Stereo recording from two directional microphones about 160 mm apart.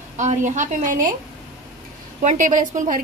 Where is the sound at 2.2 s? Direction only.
55° right (ahead or behind).